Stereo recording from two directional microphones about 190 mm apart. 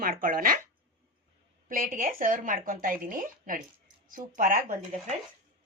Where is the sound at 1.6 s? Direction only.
45° right (ahead or behind).